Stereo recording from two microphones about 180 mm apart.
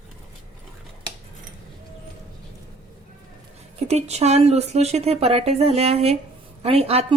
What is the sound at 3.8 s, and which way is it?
A woman's voice, 35° right (ahead or behind).